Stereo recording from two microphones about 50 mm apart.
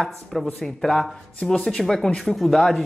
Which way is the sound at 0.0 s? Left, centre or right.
Centre.